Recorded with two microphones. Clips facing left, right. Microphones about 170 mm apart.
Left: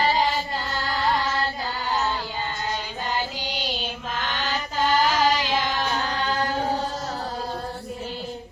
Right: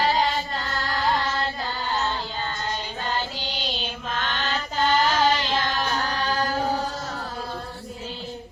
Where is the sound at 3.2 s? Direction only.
15° left (ahead or behind).